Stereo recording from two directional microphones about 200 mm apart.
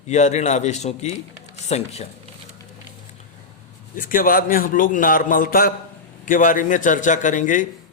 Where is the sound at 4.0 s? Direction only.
45° left (ahead or behind).